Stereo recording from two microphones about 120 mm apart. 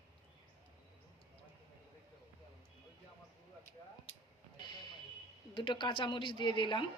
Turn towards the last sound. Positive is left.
turn(degrees=40)  # may be behind; listen again after turning